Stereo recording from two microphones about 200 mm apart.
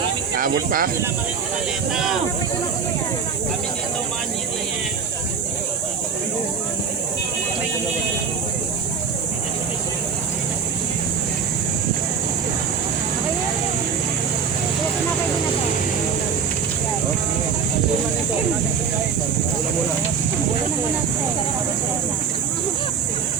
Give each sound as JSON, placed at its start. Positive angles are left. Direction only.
{"t": 0.3, "sound": "speech", "side_deg": -45}
{"t": 1.9, "sound": "speech", "side_deg": 0}